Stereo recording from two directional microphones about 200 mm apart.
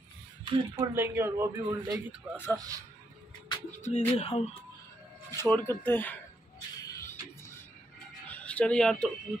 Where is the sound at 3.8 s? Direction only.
35° left (ahead or behind).